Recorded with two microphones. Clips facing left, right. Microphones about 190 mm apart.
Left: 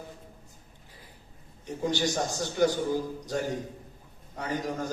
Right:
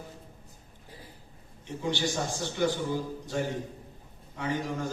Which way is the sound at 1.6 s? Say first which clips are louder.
Left 2 dB; 40° left (ahead or behind).